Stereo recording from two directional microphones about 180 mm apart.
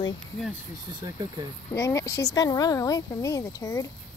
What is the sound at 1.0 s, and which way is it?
Speech, 20° right (ahead or behind).